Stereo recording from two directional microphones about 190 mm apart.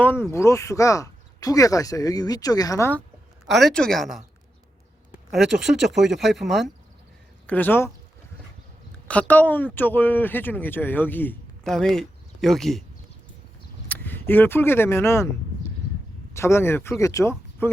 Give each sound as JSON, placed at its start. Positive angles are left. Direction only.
{"t": 0.0, "sound": "speech", "side_deg": 10}
{"t": 3.4, "sound": "speech", "side_deg": 0}
{"t": 9.0, "sound": "speech", "side_deg": 10}
{"t": 13.8, "sound": "speech", "side_deg": 10}
{"t": 16.3, "sound": "speech", "side_deg": 15}